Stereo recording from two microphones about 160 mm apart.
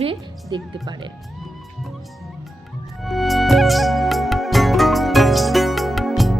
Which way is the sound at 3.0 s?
Centre (ahead or behind).